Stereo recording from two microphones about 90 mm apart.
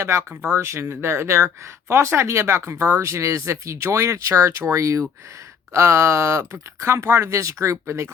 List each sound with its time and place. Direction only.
0.0 s speech: 30° right (ahead or behind)